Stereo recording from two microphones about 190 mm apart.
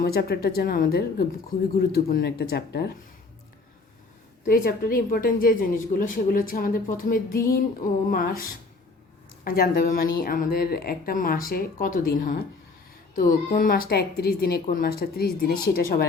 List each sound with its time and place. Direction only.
0.0 s a woman's voice: 55° left (ahead or behind)
4.4 s a woman's voice: 50° left (ahead or behind)